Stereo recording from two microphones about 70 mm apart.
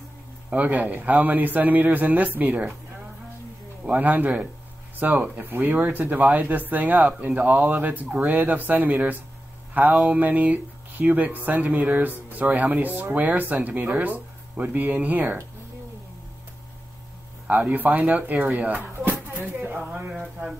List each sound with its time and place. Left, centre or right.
0.5 s speech: right
3.8 s speech: right
17.5 s speech: right